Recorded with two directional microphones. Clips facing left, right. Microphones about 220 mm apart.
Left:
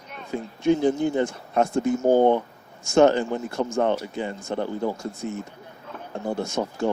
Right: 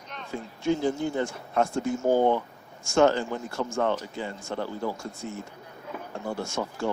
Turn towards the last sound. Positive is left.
turn(degrees=20)  # may be behind; listen again after turning